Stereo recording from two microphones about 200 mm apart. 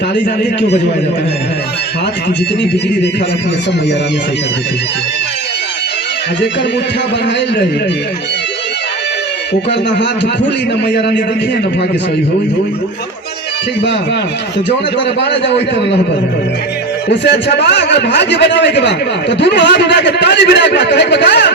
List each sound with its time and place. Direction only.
10.8 s a man's voice: 60° left (ahead or behind)
14.9 s a man's voice: 60° left (ahead or behind)
17.1 s a man's voice: 60° left (ahead or behind)